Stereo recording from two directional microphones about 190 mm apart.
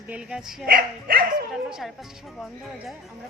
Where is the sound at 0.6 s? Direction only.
50° right (ahead or behind).